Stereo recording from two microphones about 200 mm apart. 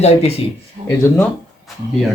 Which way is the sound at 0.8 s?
35° right (ahead or behind).